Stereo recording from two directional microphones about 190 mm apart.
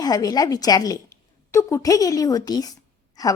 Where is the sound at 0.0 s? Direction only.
20° left (ahead or behind).